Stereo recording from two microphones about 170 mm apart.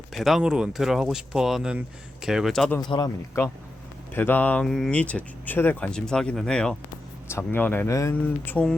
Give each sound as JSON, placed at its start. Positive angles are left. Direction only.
{"t": 0.1, "sound": "speech", "side_deg": 0}
{"t": 2.8, "sound": "speech", "side_deg": 25}